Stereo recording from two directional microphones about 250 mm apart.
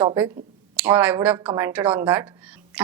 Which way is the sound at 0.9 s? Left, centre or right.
Centre.